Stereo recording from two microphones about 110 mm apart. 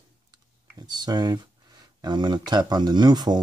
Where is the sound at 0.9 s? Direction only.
40° right (ahead or behind).